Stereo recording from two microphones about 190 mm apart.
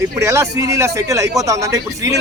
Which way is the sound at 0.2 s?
15° right (ahead or behind).